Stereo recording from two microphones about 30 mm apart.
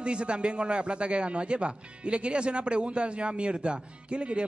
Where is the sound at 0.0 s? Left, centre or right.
Right.